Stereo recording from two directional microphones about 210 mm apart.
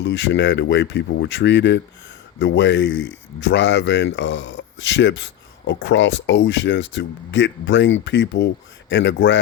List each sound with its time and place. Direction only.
0.0 s speech: 60° left (ahead or behind)